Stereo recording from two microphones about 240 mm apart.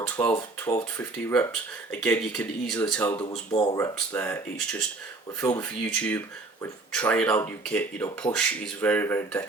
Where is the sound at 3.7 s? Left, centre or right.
Centre.